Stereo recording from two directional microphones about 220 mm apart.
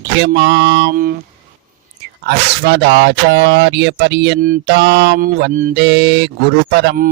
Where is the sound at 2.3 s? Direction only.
50° right (ahead or behind).